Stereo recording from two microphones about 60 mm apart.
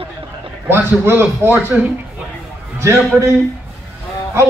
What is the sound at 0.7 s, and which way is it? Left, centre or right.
A man's voice, right.